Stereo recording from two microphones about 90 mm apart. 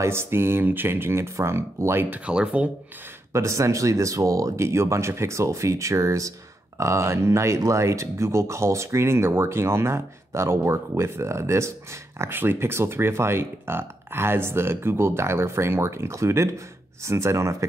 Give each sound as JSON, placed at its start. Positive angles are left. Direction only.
{"t": 0.0, "sound": "speech", "side_deg": -30}
{"t": 2.0, "sound": "speech", "side_deg": -15}
{"t": 3.3, "sound": "speech", "side_deg": -35}